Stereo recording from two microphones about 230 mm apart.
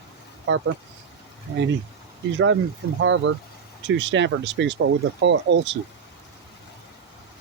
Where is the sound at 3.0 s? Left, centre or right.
Right.